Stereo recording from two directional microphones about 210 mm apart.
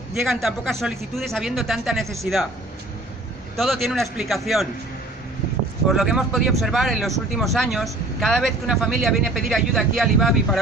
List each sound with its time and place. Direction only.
0.1 s a man's voice: centre (ahead or behind)
3.6 s a man's voice: centre (ahead or behind)
5.9 s a man's voice: centre (ahead or behind)